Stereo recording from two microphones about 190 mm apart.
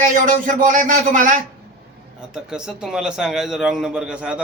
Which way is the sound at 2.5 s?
5° right (ahead or behind).